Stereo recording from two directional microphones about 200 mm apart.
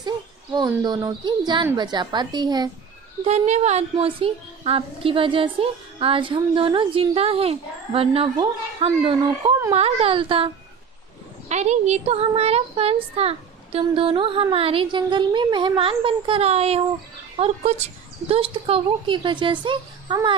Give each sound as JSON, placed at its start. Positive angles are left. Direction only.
{"t": 0.5, "sound": "a woman's voice", "side_deg": -20}
{"t": 3.2, "sound": "a woman's voice", "side_deg": -35}